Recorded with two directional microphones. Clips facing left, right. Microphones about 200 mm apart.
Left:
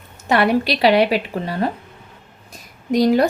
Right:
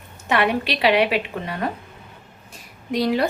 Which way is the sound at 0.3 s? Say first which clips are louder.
Left 4 dB; 40° left (ahead or behind).